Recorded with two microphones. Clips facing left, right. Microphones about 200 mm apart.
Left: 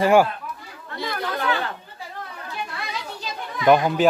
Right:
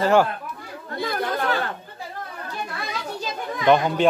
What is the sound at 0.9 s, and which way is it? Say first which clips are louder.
Chatter: right 2 dB; 50° right (ahead or behind).